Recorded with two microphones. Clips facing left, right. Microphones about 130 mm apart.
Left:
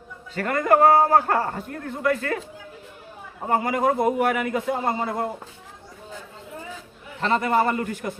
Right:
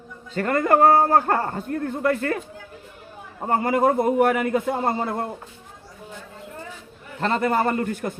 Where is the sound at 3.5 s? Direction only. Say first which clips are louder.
Right 2 dB; 40° right (ahead or behind).